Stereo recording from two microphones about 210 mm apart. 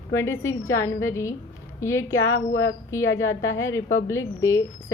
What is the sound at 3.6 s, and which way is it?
A woman's voice, 15° left (ahead or behind).